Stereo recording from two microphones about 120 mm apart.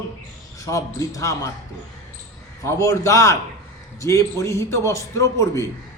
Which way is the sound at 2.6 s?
25° left (ahead or behind).